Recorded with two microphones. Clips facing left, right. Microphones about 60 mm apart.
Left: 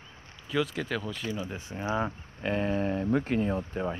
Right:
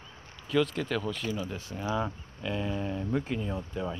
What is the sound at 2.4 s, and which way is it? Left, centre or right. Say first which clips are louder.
Speech: left 4 dB; left.